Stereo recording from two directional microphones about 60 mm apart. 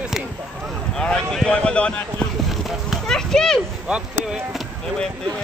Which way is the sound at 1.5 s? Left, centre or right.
Centre.